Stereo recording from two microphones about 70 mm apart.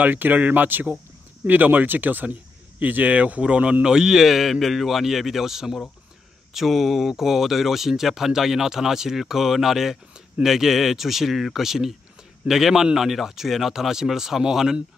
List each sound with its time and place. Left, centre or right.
0.0 s speech: right; by 14.8 s centre